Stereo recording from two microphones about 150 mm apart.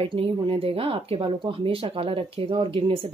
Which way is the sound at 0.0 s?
35° right (ahead or behind).